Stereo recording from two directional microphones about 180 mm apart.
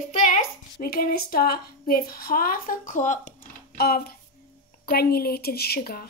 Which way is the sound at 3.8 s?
60° left (ahead or behind).